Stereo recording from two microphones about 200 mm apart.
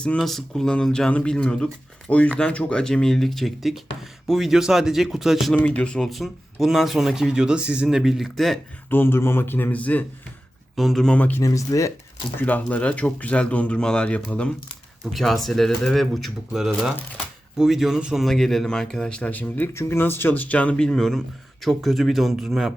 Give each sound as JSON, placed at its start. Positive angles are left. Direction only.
{"t": 0.0, "sound": "speech", "side_deg": 5}